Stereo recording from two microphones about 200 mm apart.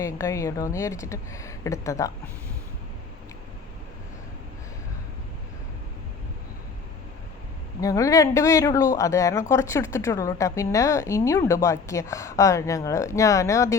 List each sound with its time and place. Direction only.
0.0 s speech: 15° left (ahead or behind)
7.8 s speech: 15° left (ahead or behind)